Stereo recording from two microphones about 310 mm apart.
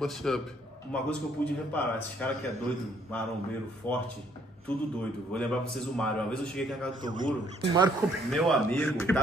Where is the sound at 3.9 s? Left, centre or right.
Centre.